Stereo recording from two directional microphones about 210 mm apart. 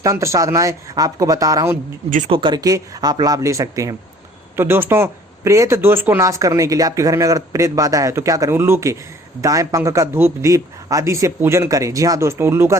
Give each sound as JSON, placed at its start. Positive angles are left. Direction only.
{"t": 0.0, "sound": "speech", "side_deg": -15}
{"t": 2.0, "sound": "speech", "side_deg": -40}
{"t": 2.3, "sound": "speech", "side_deg": -20}